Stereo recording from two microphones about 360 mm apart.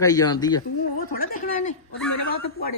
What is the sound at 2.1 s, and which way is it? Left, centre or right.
Speech, left.